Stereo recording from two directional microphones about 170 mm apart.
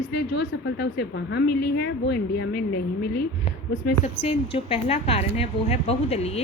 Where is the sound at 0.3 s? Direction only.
90° left.